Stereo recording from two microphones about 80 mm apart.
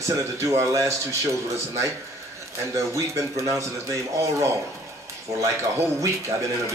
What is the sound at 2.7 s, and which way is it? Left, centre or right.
Speech, right.